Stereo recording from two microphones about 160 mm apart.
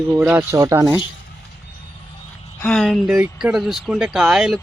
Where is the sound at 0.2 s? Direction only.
15° right (ahead or behind).